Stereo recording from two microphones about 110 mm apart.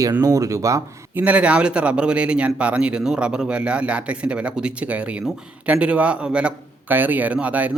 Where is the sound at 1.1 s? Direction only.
15° right (ahead or behind).